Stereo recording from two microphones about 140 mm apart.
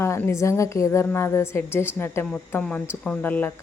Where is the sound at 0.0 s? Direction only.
20° left (ahead or behind).